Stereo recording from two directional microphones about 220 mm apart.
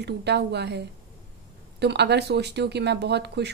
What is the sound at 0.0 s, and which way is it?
Speech, 50° right (ahead or behind).